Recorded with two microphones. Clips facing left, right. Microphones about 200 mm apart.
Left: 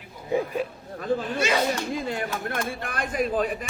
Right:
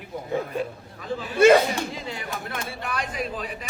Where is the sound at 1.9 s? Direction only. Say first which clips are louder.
Left 5 dB; 50° left (ahead or behind).